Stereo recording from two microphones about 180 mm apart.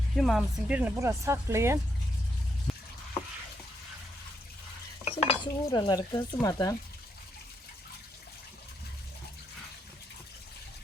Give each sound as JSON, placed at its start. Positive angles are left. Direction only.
{"t": 0.2, "sound": "speech", "side_deg": 0}
{"t": 2.7, "sound": "frying", "side_deg": 0}
{"t": 5.0, "sound": "dishes", "side_deg": 30}